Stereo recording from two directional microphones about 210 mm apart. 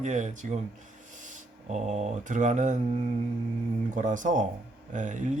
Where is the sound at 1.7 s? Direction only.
30° right (ahead or behind).